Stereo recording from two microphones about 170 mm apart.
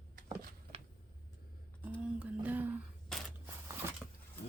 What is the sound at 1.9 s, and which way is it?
Humming, 5° right (ahead or behind).